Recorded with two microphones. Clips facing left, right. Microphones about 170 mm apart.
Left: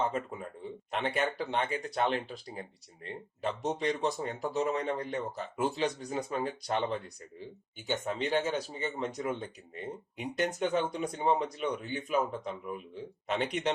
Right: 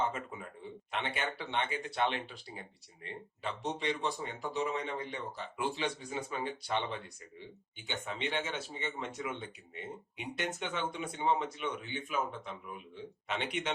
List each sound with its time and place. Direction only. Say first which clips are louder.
0.9 s speech: left 6 dB; 40° left (ahead or behind)